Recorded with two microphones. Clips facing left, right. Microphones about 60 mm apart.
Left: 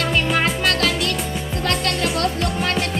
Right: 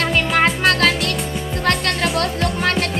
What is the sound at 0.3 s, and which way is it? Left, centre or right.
Music, right.